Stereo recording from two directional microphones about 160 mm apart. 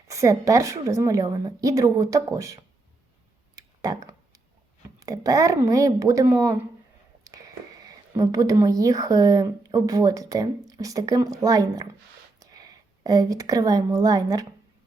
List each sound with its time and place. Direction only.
0.1 s speech: 20° right (ahead or behind)
3.5 s tick-tock: 20° right (ahead or behind)
4.9 s speech: 20° right (ahead or behind)
7.8 s speech: 25° right (ahead or behind)